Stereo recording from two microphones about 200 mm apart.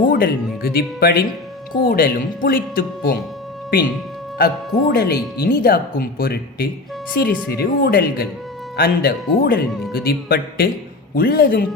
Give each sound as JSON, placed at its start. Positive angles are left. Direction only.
{"t": 0.0, "sound": "speech", "side_deg": 45}
{"t": 4.4, "sound": "speech", "side_deg": 50}